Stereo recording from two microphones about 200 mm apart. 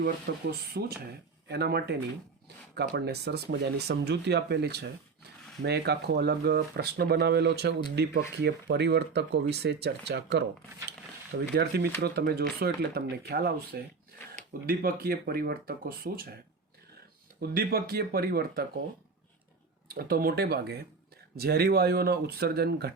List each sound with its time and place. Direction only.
0.3 s speech: 55° right (ahead or behind)
17.5 s speech: 45° right (ahead or behind)
19.9 s speech: 45° right (ahead or behind)